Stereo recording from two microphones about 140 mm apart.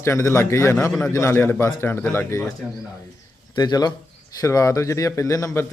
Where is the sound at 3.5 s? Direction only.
30° left (ahead or behind).